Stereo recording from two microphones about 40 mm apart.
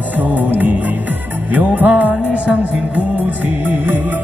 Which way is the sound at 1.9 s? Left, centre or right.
Right.